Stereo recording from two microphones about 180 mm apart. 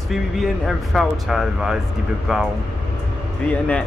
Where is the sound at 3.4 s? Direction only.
10° left (ahead or behind).